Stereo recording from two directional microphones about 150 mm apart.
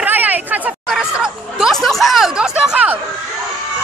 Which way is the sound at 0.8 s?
Centre (ahead or behind).